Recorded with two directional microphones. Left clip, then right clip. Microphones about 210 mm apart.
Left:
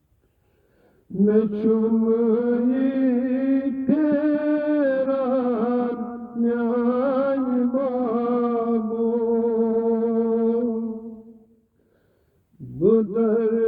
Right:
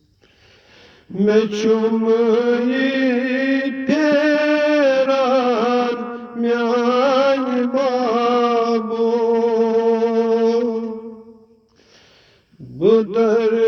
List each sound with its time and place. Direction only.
1.3 s mantra: 5° right (ahead or behind)
2.0 s music: 5° right (ahead or behind)
6.1 s a sound: 25° right (ahead or behind)
6.4 s a sound: 5° right (ahead or behind)
7.8 s music: 5° right (ahead or behind)
9.3 s music: 30° right (ahead or behind)
9.9 s music: 5° right (ahead or behind)
10.8 s music: 20° right (ahead or behind)
12.8 s a sound: 10° right (ahead or behind)